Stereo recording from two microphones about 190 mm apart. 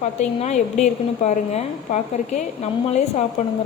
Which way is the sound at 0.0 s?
40° left (ahead or behind).